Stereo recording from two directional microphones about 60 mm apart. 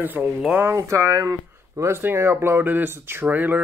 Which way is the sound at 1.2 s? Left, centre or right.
Right.